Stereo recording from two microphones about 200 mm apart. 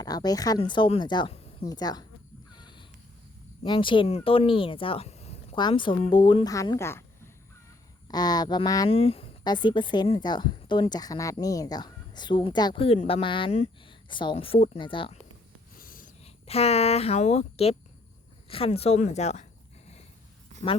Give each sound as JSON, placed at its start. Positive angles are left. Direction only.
{"t": 0.0, "sound": "speech", "side_deg": 20}
{"t": 2.6, "sound": "a sound", "side_deg": 20}
{"t": 3.6, "sound": "speech", "side_deg": 25}
{"t": 8.0, "sound": "speech", "side_deg": 20}
{"t": 15.8, "sound": "a sound", "side_deg": 45}
{"t": 18.4, "sound": "speech", "side_deg": 30}